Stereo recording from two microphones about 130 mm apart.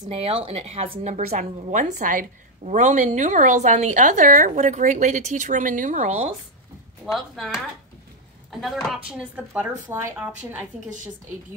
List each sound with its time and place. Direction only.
0.1 s speech: 50° right (ahead or behind)
1.0 s a woman's voice: 65° right (ahead or behind)
7.1 s speech: centre (ahead or behind)
9.5 s a woman's voice: 15° right (ahead or behind)